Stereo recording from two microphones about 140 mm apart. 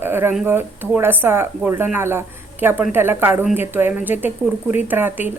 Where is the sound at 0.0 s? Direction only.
15° right (ahead or behind).